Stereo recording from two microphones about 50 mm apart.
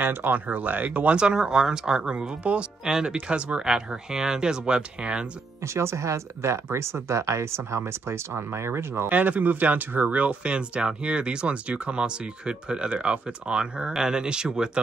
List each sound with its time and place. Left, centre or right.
0.0 s speech: right
1.2 s speech: centre
5.6 s speech: right
9.1 s speech: right; by 14.7 s centre